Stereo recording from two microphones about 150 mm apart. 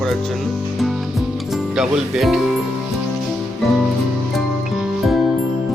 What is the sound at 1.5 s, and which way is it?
Speech, centre (ahead or behind).